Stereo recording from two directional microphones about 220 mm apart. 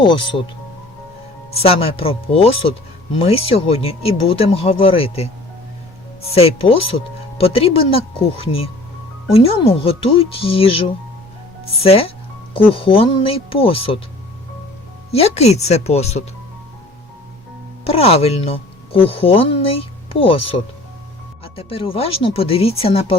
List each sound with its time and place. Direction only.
0.0 s speech: 20° left (ahead or behind)
1.5 s speech: 25° left (ahead or behind)
9.3 s speech: 25° left (ahead or behind)
15.1 s speech: 30° left (ahead or behind)
17.8 s speech: 25° left (ahead or behind)